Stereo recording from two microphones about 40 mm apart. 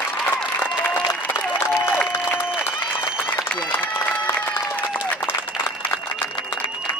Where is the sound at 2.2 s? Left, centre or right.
Left.